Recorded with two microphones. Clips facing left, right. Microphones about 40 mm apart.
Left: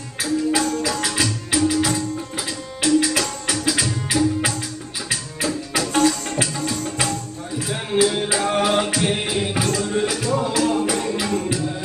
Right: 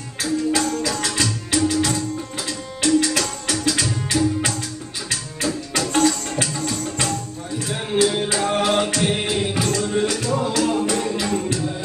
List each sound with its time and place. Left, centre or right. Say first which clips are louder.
0.2 s music: even; centre